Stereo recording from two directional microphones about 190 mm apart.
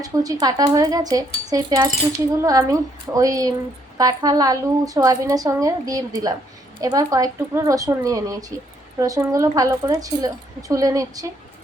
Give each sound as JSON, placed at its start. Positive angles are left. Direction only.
{"t": 0.0, "sound": "a woman's voice", "side_deg": -20}